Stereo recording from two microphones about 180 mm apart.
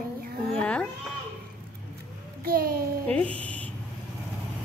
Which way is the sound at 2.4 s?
55° right (ahead or behind).